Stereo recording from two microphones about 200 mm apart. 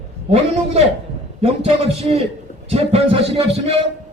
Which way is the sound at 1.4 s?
30° right (ahead or behind).